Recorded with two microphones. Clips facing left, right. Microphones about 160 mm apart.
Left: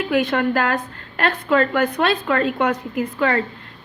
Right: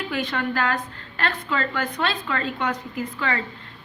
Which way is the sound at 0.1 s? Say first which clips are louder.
Left 9 dB; 55° left (ahead or behind).